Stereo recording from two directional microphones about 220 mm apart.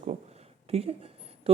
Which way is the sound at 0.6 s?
25° right (ahead or behind).